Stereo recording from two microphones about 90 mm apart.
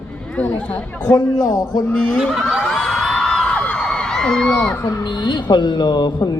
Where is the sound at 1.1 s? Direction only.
45° left (ahead or behind).